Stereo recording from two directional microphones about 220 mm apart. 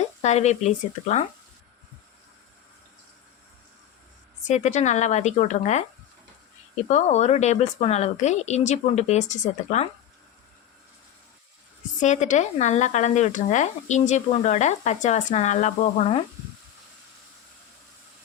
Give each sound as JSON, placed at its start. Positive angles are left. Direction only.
{"t": 0.2, "sound": "speech", "side_deg": 30}
{"t": 4.4, "sound": "speech", "side_deg": 30}
{"t": 6.8, "sound": "speech", "side_deg": 30}
{"t": 11.9, "sound": "speech", "side_deg": 35}